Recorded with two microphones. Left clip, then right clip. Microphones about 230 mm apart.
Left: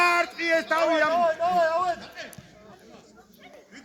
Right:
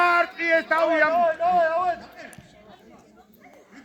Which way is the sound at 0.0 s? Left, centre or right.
Left.